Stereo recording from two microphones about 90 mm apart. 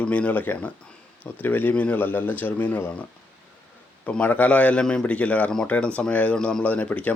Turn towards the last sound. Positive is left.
turn(degrees=15)  # may be behind; listen again after turning